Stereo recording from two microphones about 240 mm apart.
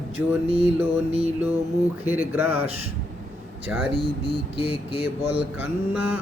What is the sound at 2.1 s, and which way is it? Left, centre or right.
Mantra, centre.